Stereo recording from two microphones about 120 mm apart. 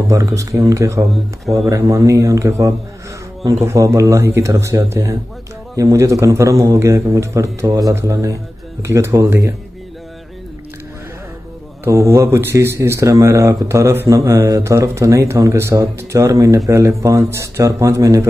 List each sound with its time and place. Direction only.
0.1 s speech: 25° right (ahead or behind)
11.8 s speech: 25° right (ahead or behind)